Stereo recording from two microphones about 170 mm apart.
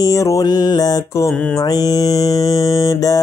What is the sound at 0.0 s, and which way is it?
Mantra, 20° left (ahead or behind).